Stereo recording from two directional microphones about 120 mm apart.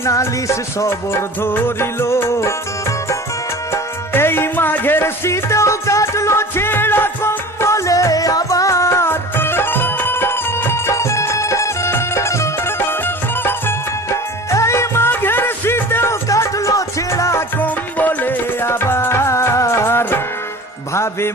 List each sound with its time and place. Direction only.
0.0 s music: 25° left (ahead or behind)
3.7 s music: 20° left (ahead or behind)